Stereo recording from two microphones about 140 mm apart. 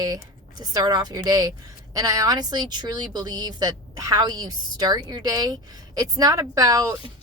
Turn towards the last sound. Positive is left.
turn(degrees=-25)  # may be behind; listen again after turning